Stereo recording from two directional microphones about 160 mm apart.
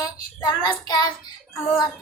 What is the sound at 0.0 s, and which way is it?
Child singing, 25° left (ahead or behind).